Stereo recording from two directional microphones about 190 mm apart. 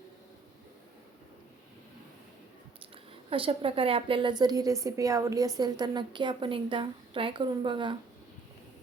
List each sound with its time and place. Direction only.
3.2 s a woman's voice: 30° right (ahead or behind)